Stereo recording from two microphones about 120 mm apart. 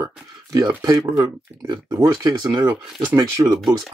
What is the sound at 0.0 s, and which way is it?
Speech, 30° right (ahead or behind).